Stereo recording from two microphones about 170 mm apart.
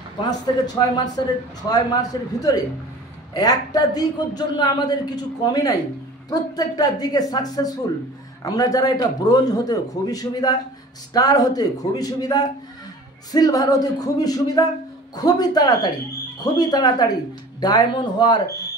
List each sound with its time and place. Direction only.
0.7 s a man's voice: 25° left (ahead or behind)